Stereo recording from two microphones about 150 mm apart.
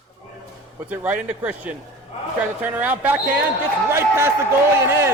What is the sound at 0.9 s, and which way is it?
A man's voice, 10° right (ahead or behind).